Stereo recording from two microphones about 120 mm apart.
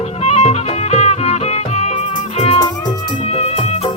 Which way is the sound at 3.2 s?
55° left (ahead or behind).